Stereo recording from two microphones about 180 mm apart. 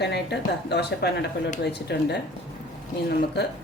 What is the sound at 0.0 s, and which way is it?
Speech, 65° left (ahead or behind).